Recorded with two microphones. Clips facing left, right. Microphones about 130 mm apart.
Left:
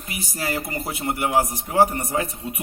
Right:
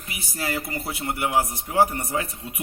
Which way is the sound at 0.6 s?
15° left (ahead or behind).